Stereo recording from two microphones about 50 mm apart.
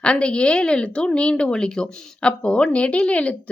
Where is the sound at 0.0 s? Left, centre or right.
Left.